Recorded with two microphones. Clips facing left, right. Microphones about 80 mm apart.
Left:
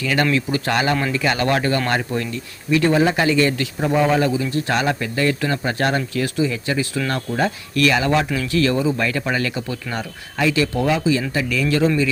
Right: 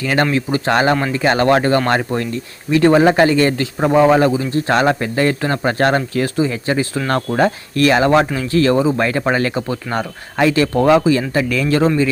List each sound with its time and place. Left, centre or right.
0.0 s speech: right
0.3 s speech: right
7.1 s speech: right
7.8 s speech: right